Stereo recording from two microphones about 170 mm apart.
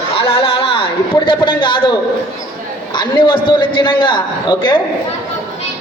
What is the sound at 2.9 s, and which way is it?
A man's voice, 30° left (ahead or behind).